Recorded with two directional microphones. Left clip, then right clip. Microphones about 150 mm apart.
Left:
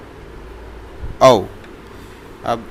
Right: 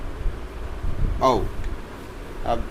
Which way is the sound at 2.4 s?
35° left (ahead or behind).